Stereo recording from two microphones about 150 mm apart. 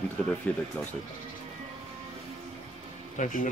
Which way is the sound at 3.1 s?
60° left (ahead or behind).